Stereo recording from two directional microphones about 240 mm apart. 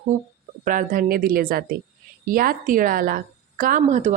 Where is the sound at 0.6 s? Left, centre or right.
Right.